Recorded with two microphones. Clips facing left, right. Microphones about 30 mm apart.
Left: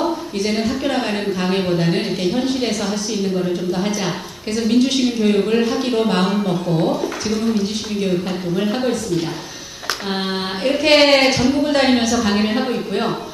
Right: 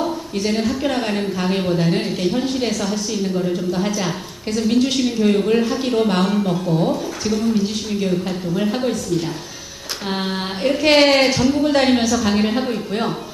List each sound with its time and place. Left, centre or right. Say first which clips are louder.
0.3 s a woman's voice: right 2 dB; centre
10.1 s a woman's voice: right 1 dB; centre